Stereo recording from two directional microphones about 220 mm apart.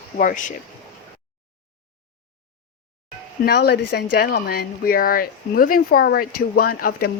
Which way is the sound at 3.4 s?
45° left (ahead or behind).